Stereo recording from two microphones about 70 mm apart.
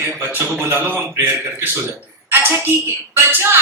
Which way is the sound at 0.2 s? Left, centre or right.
Right.